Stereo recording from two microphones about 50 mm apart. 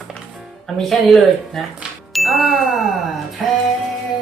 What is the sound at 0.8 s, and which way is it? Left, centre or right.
Speech, centre.